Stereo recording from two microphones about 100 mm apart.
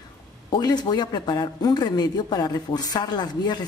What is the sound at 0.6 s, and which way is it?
Speech, 45° left (ahead or behind).